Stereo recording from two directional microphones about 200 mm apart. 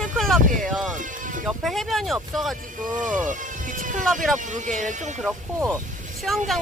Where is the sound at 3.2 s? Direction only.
40° right (ahead or behind).